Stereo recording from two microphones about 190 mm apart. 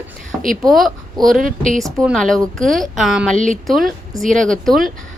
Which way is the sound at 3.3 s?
40° right (ahead or behind).